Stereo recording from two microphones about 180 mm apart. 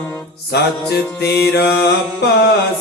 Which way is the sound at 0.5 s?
65° left (ahead or behind).